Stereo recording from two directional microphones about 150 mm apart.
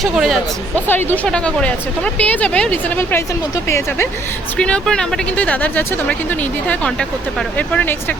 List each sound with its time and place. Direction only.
0.0 s speech: centre (ahead or behind)
0.9 s speech: 10° left (ahead or behind)
4.5 s speech: 5° left (ahead or behind)
7.3 s speech: 10° left (ahead or behind)